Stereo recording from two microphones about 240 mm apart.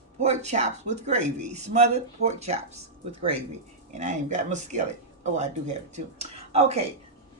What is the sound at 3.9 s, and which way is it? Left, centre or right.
Speech, right.